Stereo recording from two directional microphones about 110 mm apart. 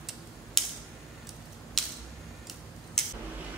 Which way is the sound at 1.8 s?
5° left (ahead or behind).